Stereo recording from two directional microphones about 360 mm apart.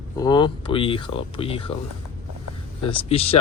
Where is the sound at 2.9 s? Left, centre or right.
Centre.